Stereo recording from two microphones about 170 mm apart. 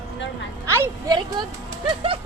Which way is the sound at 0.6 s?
15° right (ahead or behind).